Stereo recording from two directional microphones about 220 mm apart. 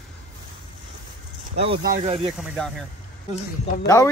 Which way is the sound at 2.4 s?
Centre (ahead or behind).